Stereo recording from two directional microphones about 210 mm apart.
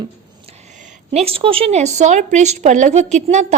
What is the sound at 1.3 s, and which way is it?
A woman's voice, 25° right (ahead or behind).